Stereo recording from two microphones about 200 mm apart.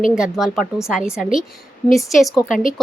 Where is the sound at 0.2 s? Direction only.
Centre (ahead or behind).